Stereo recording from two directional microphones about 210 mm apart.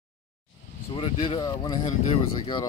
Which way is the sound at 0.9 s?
25° left (ahead or behind).